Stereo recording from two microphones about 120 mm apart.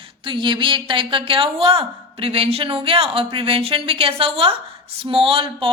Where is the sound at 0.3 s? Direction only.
40° right (ahead or behind).